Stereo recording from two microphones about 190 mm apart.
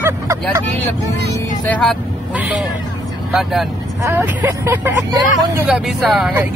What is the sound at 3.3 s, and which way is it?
Speech, centre (ahead or behind).